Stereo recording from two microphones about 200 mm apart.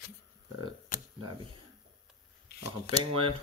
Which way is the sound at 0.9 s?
45° left (ahead or behind).